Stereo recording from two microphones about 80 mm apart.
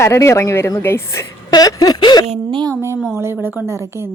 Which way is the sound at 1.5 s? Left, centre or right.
Left.